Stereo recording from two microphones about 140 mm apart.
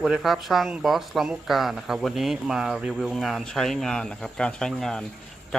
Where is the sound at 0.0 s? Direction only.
Centre (ahead or behind).